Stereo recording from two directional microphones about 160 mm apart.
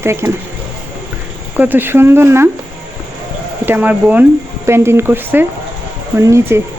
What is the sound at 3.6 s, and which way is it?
Speech, 10° right (ahead or behind).